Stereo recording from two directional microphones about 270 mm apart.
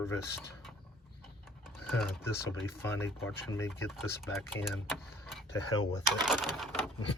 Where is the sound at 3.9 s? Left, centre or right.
Centre.